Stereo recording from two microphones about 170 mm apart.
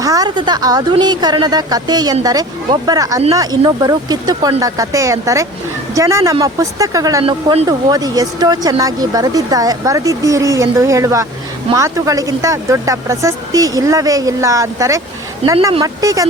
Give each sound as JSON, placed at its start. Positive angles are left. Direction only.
{"t": 0.0, "sound": "speech", "side_deg": -20}